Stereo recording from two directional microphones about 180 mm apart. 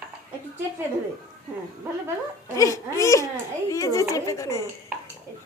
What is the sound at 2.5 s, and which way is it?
A woman's voice, 15° left (ahead or behind).